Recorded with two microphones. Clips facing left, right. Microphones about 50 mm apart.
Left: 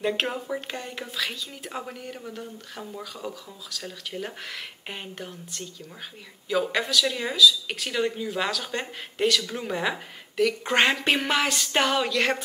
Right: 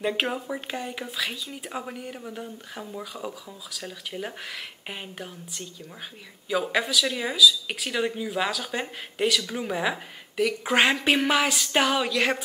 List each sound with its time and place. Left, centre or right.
0.0 s speech: centre